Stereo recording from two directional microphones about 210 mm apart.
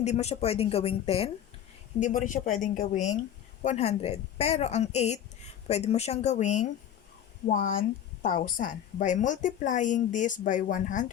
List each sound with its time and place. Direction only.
0.0 s a woman's voice: 30° left (ahead or behind)